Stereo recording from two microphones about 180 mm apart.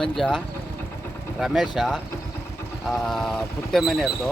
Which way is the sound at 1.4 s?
Centre (ahead or behind).